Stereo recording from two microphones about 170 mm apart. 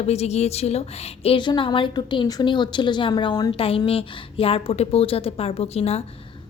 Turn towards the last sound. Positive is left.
turn(degrees=35)  # may be behind; listen again after turning